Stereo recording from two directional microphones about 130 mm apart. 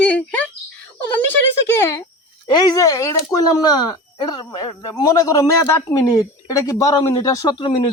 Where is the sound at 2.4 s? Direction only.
30° left (ahead or behind).